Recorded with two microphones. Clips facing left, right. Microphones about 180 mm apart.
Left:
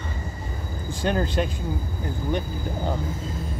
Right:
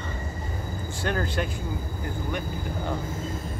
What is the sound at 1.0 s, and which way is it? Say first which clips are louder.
Speech: left 4 dB; 20° left (ahead or behind).